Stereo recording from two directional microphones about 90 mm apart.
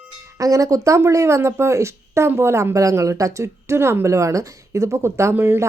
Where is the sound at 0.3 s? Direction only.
40° right (ahead or behind).